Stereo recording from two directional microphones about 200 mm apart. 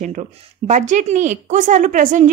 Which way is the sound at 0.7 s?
35° right (ahead or behind).